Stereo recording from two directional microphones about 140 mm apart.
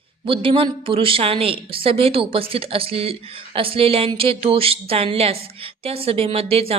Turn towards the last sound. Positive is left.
turn(degrees=-45)  # may be behind; listen again after turning